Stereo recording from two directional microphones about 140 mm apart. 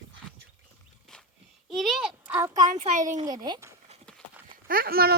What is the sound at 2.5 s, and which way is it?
Speech, 25° right (ahead or behind).